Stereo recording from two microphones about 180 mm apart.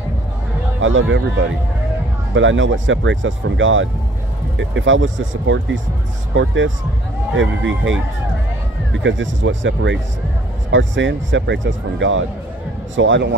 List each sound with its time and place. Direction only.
0.7 s speech: 90° right
9.0 s speech: 90° right